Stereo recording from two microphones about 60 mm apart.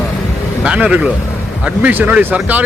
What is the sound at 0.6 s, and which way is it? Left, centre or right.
A man's voice, centre.